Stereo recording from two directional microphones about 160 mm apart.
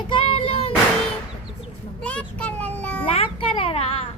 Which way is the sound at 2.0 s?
10° left (ahead or behind).